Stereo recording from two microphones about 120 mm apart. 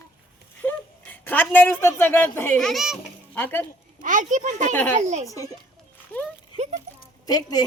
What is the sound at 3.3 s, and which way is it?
Speech, 15° left (ahead or behind).